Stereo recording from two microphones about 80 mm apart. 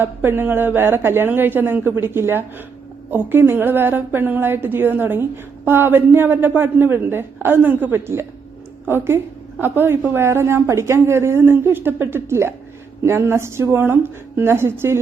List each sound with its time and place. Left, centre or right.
0.0 s a woman's voice: right